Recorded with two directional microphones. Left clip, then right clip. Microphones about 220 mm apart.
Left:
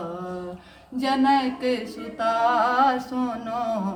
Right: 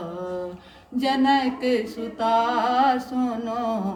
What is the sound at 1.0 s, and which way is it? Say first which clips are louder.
Mantra: even; 20° left (ahead or behind).